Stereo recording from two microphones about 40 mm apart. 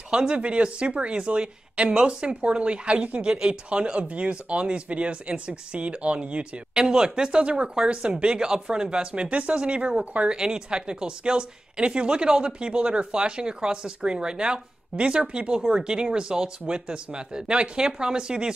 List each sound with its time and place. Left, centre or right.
0.1 s speech: right